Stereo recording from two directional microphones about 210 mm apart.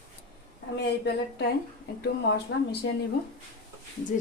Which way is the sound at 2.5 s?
55° left (ahead or behind).